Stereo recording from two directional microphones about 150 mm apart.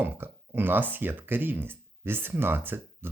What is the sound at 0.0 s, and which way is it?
Speech, 15° right (ahead or behind).